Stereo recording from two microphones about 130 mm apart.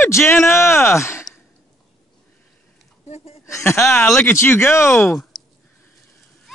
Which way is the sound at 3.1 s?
55° left (ahead or behind).